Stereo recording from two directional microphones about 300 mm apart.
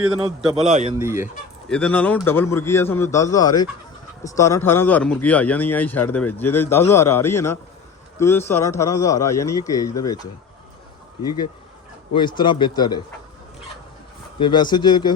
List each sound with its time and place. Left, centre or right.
0.1 s a man's voice: centre
0.9 s speech: centre
1.7 s speech: centre
12.1 s speech: centre
14.3 s speech: centre